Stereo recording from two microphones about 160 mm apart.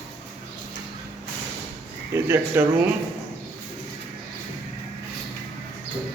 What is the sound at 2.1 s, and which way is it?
Speech, 15° right (ahead or behind).